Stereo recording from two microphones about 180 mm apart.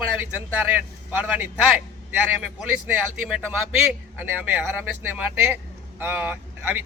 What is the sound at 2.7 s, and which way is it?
Speech, 5° right (ahead or behind).